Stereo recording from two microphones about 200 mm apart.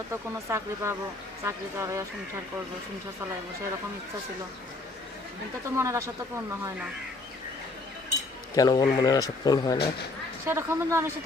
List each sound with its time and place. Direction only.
0.1 s speech: 15° right (ahead or behind)
5.7 s speech: 15° right (ahead or behind)
8.5 s speech: 20° left (ahead or behind)
10.4 s speech: 10° right (ahead or behind)